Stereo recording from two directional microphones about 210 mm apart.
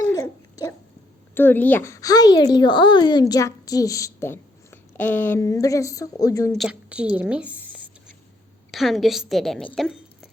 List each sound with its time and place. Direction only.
0.0 s babbling: 15° left (ahead or behind)
1.3 s speech: 10° left (ahead or behind)
6.5 s a woman's voice: centre (ahead or behind)
8.7 s a woman's voice: centre (ahead or behind)